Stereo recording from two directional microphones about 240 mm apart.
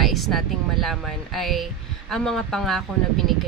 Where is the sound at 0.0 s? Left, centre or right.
Centre.